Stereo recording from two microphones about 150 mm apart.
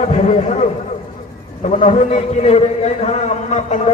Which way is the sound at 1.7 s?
45° left (ahead or behind).